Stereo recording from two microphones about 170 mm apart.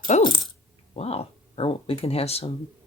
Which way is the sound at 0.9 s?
35° left (ahead or behind).